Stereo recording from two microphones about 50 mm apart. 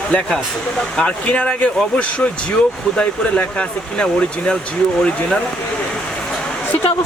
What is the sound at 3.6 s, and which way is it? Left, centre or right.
Speech, left.